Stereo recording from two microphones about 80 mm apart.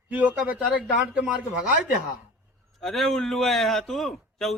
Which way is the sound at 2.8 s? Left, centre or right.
Centre.